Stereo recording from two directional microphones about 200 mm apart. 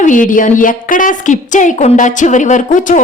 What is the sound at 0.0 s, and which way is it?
A woman's voice, 40° left (ahead or behind).